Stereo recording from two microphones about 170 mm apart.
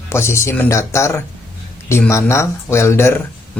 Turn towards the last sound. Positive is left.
turn(degrees=15)  # may be behind; listen again after turning